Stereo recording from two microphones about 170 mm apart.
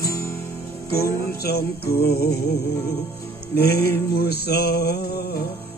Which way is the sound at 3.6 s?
70° left (ahead or behind).